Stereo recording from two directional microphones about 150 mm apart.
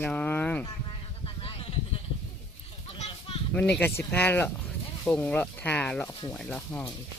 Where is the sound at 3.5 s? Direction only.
10° left (ahead or behind).